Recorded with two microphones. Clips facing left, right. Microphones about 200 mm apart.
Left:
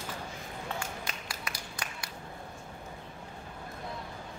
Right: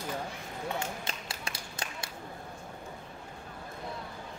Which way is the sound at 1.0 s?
25° right (ahead or behind).